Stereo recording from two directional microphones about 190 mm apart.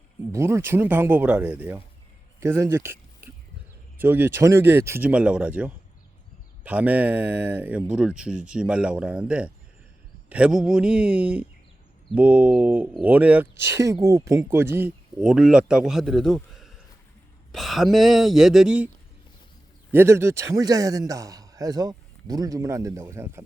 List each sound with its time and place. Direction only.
0.3 s speech: 15° right (ahead or behind)
4.0 s speech: 10° right (ahead or behind)
19.9 s speech: 10° right (ahead or behind)